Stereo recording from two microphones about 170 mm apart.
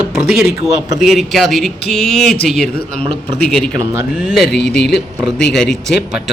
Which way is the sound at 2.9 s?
30° right (ahead or behind).